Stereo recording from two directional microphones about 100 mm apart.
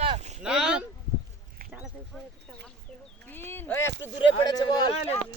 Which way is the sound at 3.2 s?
20° left (ahead or behind).